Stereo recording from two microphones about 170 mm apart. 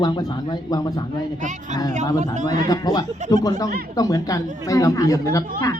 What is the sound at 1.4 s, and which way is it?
Speech, 45° right (ahead or behind).